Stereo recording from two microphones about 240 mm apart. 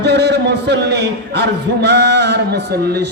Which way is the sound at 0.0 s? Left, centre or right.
Right.